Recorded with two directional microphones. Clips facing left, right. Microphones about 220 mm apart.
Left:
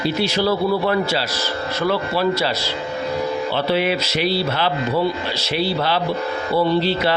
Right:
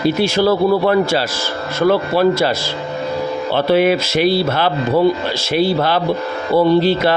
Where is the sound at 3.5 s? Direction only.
50° right (ahead or behind).